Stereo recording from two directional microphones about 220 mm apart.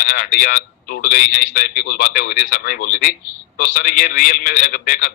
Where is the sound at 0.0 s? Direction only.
40° left (ahead or behind).